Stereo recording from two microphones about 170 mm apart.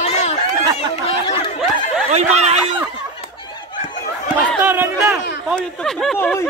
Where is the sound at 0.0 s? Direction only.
40° left (ahead or behind).